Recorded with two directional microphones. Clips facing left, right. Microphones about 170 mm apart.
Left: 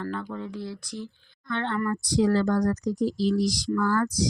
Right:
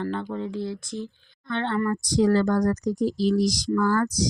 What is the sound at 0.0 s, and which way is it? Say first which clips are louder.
Speech: right 4 dB; 30° right (ahead or behind).